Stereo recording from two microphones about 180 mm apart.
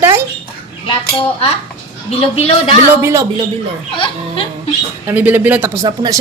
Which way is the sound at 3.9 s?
30° left (ahead or behind).